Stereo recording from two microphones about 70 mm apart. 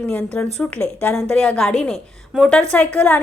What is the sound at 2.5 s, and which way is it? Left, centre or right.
Speech, centre.